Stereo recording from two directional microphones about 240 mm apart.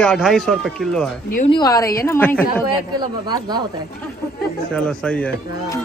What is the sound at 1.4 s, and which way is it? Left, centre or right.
Speech, centre.